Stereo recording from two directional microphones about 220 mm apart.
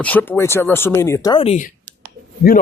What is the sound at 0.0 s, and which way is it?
A man's voice, 5° left (ahead or behind).